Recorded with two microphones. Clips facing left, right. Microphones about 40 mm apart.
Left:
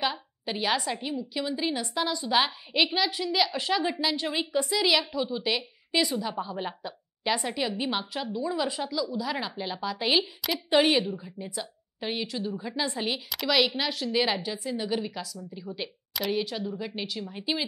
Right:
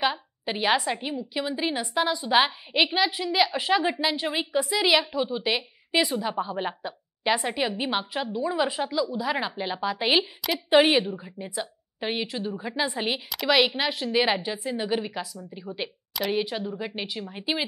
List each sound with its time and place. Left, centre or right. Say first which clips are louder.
0.0 s a woman's voice: right 3 dB; centre